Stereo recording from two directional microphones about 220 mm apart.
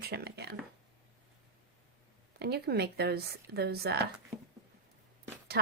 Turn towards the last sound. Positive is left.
turn(degrees=-45)  # may be behind; listen again after turning